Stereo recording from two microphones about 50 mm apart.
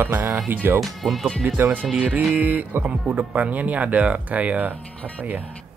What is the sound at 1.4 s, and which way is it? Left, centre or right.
Speech, right.